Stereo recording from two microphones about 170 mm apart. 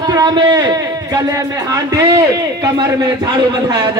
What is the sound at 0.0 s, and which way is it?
A man's voice, 25° right (ahead or behind).